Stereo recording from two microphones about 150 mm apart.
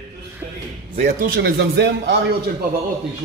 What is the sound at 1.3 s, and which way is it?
Speech, 90° right.